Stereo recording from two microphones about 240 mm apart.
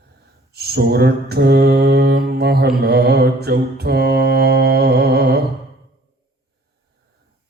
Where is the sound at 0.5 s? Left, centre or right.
Right.